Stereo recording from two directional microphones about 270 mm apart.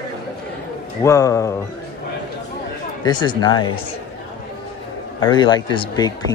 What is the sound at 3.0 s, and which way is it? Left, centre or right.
Speech, centre.